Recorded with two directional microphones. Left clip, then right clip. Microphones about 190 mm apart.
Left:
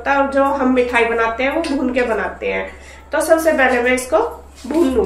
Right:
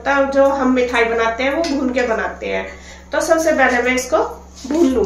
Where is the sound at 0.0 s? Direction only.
5° left (ahead or behind).